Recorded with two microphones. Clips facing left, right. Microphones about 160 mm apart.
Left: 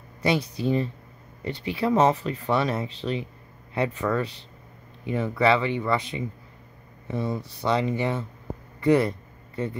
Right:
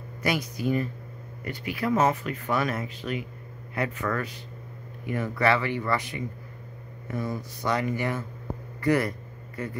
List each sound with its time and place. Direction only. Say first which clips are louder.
0.2 s speech: left 3 dB; 30° left (ahead or behind)